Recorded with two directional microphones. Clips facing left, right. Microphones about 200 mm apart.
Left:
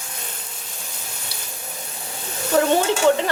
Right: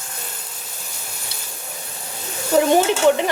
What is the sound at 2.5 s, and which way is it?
Stir, 15° right (ahead or behind).